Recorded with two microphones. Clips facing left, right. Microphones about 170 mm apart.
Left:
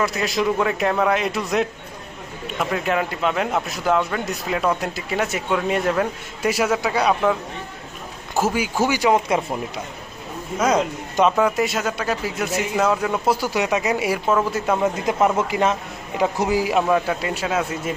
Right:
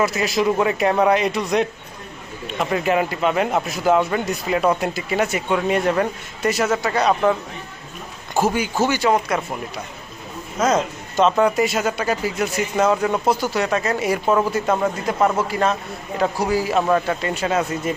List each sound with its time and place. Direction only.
0.0 s a man's voice: centre (ahead or behind)
8.4 s speech: 5° left (ahead or behind)
10.6 s speech: 10° left (ahead or behind)
11.3 s a man's voice: centre (ahead or behind)
15.4 s a man's voice: 15° left (ahead or behind)